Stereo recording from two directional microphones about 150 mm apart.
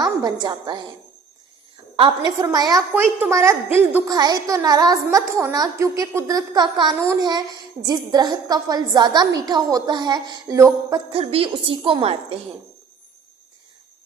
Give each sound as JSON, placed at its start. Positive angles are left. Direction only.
{"t": 0.0, "sound": "a woman's voice", "side_deg": -30}
{"t": 2.0, "sound": "a woman's voice", "side_deg": -30}
{"t": 2.9, "sound": "a woman's voice", "side_deg": -15}
{"t": 11.1, "sound": "a woman's voice", "side_deg": -40}